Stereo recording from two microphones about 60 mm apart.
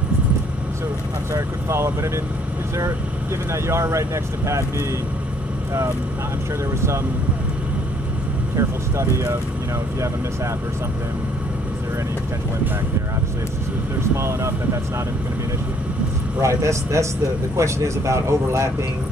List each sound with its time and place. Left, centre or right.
1.3 s speech: right
3.5 s speech: right
8.5 s speech: right
14.1 s speech: right
16.3 s speech: right